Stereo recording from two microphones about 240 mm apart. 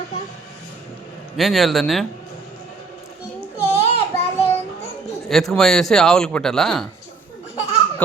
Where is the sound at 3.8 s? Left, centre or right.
Left.